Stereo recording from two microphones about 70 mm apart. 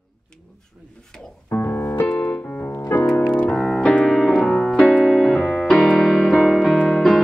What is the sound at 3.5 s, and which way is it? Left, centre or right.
Keyboard, centre.